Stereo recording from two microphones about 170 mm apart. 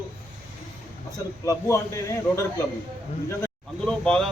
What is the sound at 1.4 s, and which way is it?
A man's voice, 20° left (ahead or behind).